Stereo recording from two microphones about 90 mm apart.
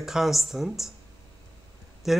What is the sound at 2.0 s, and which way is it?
Speech, 5° right (ahead or behind).